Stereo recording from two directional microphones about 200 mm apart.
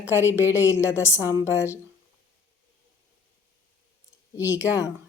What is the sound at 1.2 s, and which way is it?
Speech, 10° right (ahead or behind).